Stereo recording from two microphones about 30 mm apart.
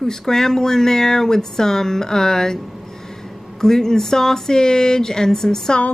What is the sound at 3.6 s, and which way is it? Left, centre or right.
Speech, centre.